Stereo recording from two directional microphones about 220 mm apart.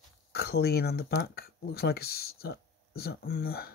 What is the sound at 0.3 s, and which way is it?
Speech, 45° left (ahead or behind).